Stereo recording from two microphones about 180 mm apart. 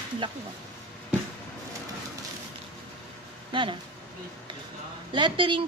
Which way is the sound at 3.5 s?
25° right (ahead or behind).